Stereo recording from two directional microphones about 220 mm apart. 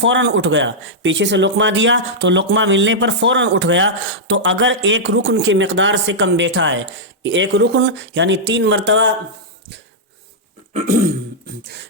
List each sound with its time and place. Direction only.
0.0 s a man's voice: 55° right (ahead or behind)
10.8 s throat clearing: 35° right (ahead or behind)